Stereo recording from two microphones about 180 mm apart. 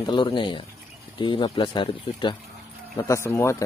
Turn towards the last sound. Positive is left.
turn(degrees=15)  # may be behind; listen again after turning